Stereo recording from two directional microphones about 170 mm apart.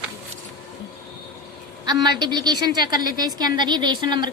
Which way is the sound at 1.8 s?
25° right (ahead or behind).